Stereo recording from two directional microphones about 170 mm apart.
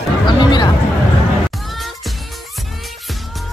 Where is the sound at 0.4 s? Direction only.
25° left (ahead or behind).